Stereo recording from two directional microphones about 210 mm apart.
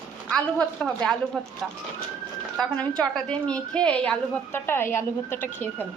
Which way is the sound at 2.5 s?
5° left (ahead or behind).